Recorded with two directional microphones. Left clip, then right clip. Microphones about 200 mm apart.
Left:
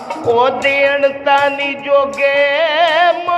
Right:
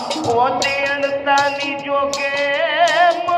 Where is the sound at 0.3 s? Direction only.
60° left (ahead or behind).